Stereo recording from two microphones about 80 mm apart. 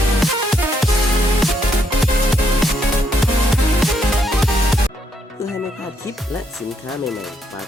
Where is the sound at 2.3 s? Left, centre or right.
Centre.